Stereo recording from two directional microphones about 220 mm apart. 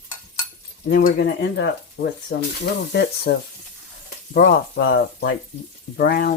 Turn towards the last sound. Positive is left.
turn(degrees=45)  # may be behind; listen again after turning